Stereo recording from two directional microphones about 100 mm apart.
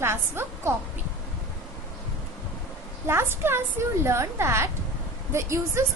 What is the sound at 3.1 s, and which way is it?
A woman's voice, 25° right (ahead or behind).